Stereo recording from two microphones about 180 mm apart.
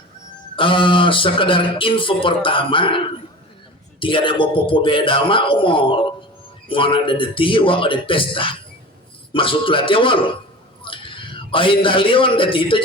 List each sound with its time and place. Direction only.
0.5 s speech: 30° left (ahead or behind)
4.0 s a man's voice: 30° left (ahead or behind)